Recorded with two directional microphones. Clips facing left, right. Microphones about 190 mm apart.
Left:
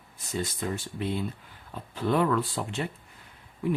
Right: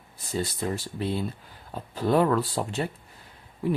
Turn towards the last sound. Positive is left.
turn(degrees=-35)  # may be behind; listen again after turning